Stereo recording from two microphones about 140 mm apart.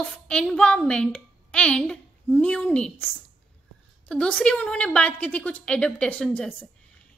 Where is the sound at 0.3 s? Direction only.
5° left (ahead or behind).